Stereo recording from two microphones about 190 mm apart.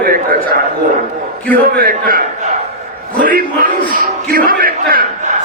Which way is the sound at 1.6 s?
50° right (ahead or behind).